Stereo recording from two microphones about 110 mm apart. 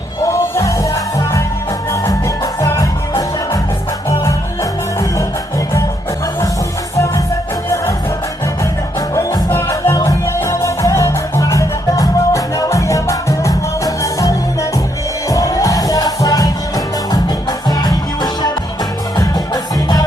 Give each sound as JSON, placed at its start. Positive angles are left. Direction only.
{"t": 0.3, "sound": "music", "side_deg": 30}
{"t": 1.9, "sound": "music", "side_deg": 30}
{"t": 9.0, "sound": "music", "side_deg": 30}